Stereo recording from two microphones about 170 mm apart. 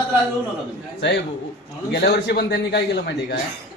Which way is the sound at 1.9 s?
75° left (ahead or behind).